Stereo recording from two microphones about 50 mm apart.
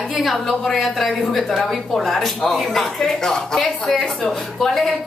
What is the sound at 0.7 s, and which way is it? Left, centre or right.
Speech, centre.